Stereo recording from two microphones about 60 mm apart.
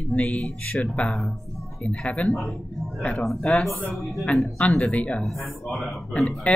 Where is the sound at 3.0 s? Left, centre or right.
Centre.